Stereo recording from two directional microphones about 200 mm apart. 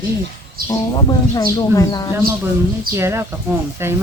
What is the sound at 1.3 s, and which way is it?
Speech, 20° left (ahead or behind).